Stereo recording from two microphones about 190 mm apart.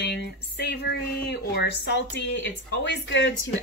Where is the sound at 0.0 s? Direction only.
60° left (ahead or behind).